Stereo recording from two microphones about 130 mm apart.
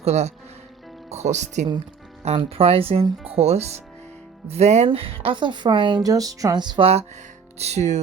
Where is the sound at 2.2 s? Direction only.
50° right (ahead or behind).